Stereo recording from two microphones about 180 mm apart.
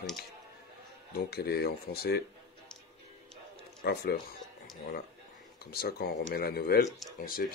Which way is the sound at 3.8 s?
65° left (ahead or behind).